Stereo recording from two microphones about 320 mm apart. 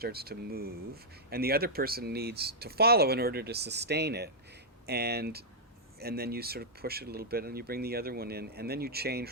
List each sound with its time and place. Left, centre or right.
0.0 s speech: right